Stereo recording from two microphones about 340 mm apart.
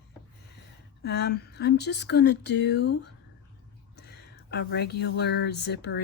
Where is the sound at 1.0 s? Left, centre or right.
Left.